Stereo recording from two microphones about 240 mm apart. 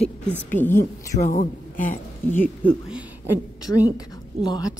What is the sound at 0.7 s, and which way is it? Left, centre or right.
A woman's voice, left.